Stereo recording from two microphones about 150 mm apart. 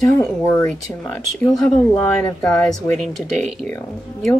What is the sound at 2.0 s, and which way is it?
Speech, 10° left (ahead or behind).